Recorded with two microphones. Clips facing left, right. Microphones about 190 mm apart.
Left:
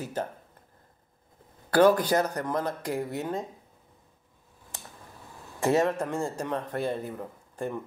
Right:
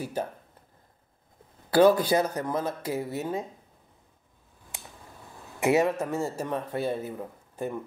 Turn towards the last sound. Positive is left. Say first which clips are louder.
# even
turn(degrees=-5)  # may be behind; listen again after turning